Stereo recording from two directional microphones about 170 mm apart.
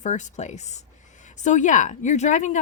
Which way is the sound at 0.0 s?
45° left (ahead or behind).